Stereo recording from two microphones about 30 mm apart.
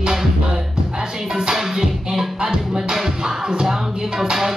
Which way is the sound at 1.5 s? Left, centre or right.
Right.